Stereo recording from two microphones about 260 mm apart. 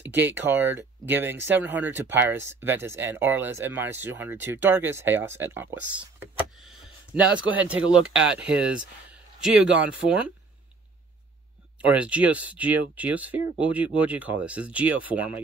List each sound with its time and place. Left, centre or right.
0.0 s speech: centre
11.8 s speech: centre